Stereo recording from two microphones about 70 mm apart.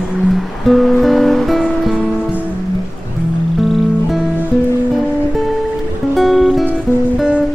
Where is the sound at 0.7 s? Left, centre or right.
Centre.